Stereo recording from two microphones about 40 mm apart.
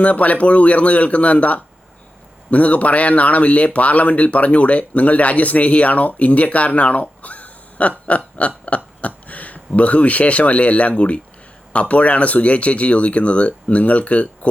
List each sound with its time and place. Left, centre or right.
0.0 s speech: left